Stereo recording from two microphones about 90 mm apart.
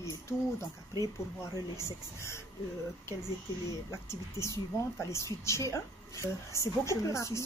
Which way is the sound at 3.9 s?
35° left (ahead or behind).